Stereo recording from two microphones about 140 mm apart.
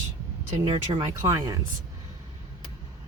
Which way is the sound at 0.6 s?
35° right (ahead or behind).